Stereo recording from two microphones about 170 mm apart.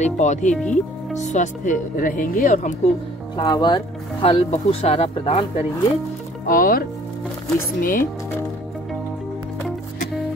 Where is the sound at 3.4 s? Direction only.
25° left (ahead or behind).